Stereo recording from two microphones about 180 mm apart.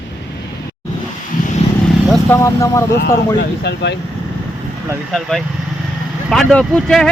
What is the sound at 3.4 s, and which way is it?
Speech, 70° left (ahead or behind).